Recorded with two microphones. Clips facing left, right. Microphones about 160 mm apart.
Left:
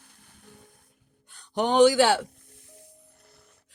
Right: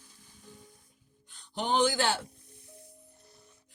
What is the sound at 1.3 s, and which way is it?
Speech, 55° left (ahead or behind).